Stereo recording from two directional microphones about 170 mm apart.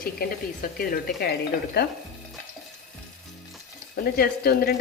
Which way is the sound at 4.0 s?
65° left (ahead or behind).